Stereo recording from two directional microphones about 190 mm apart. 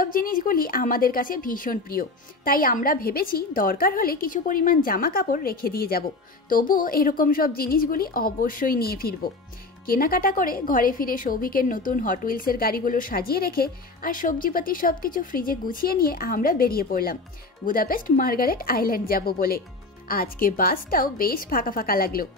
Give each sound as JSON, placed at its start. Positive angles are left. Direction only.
{"t": 0.0, "sound": "a woman's voice", "side_deg": 50}